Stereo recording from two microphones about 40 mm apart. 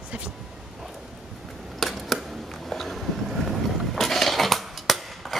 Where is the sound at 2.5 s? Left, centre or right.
Centre.